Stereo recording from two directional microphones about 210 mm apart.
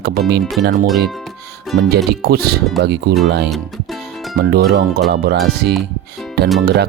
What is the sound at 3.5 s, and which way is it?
Music, centre (ahead or behind).